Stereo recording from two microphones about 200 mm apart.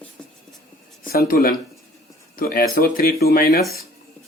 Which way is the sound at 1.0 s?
45° left (ahead or behind).